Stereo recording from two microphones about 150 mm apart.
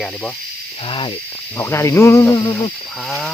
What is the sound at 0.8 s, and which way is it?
Speech, 35° left (ahead or behind).